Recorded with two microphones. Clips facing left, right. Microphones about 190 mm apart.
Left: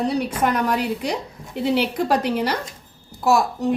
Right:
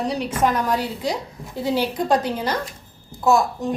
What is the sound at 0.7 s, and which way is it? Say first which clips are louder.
A woman's voice: left 1 dB; 65° left (ahead or behind).